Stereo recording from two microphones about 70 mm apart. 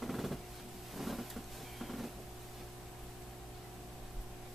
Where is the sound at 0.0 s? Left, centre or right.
Centre.